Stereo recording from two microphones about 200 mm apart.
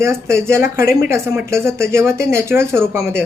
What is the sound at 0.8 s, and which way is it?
Speech, 50° left (ahead or behind).